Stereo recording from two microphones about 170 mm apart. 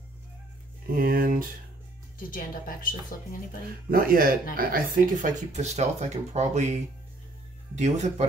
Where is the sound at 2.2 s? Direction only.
55° left (ahead or behind).